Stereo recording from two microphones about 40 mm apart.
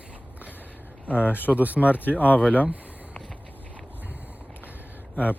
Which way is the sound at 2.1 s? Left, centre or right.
Left.